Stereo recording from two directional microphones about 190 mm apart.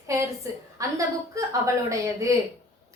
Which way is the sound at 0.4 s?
15° right (ahead or behind).